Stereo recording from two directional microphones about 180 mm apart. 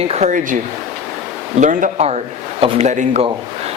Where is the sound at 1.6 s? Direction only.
45° right (ahead or behind).